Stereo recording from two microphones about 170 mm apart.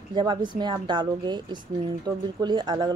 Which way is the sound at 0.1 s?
25° right (ahead or behind).